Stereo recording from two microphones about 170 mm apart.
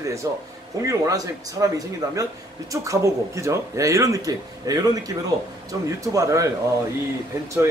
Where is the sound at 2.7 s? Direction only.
20° right (ahead or behind).